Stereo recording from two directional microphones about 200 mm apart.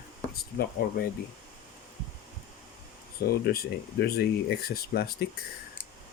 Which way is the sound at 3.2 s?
50° left (ahead or behind).